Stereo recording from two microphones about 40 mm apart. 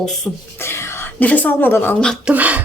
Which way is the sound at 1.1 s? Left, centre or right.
Left.